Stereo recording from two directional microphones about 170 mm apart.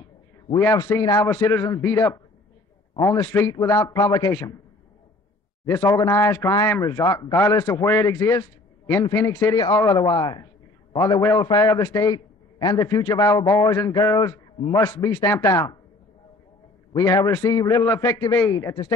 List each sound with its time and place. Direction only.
0.6 s a man's voice: 15° left (ahead or behind)
5.7 s a man's voice: 20° left (ahead or behind)
16.9 s a man's voice: 20° left (ahead or behind)